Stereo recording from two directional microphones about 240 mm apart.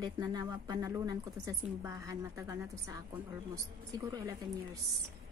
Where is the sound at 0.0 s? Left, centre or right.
Centre.